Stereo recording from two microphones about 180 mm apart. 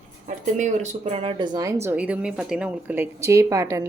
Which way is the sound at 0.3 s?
40° right (ahead or behind).